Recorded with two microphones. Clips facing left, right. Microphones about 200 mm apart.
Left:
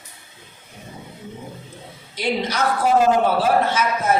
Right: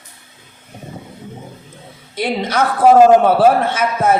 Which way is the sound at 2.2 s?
55° right (ahead or behind).